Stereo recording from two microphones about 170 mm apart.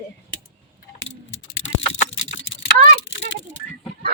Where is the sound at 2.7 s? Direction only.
55° right (ahead or behind).